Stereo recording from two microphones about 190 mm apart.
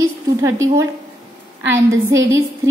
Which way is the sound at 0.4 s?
15° right (ahead or behind).